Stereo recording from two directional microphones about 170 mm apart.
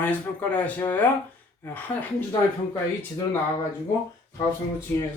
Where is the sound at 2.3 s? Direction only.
20° left (ahead or behind).